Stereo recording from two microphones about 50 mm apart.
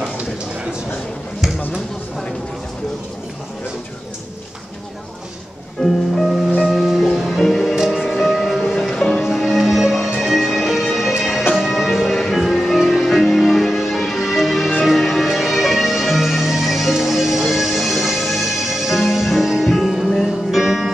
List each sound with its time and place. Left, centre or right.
5.8 s music: centre
6.6 s music: centre
7.7 s music: centre
8.1 s music: centre
9.2 s music: centre